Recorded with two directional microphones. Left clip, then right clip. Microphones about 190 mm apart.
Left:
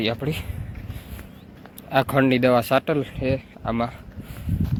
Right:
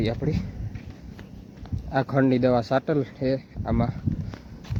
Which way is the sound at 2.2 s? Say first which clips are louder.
Left 3 dB; centre (ahead or behind).